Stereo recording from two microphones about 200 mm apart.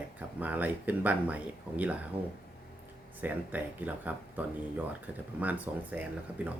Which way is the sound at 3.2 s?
10° right (ahead or behind).